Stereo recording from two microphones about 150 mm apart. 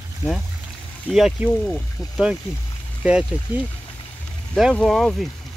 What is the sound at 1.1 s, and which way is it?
Speech, centre (ahead or behind).